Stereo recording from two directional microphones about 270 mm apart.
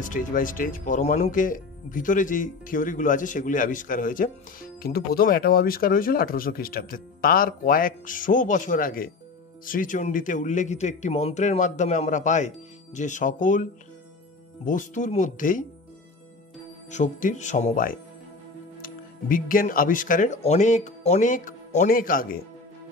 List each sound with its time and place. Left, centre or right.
0.0 s speech: left
16.9 s speech: left